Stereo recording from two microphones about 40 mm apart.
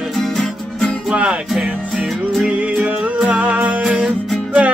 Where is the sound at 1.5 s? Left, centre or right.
Centre.